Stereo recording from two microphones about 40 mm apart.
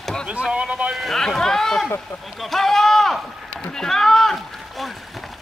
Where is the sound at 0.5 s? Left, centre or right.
Right.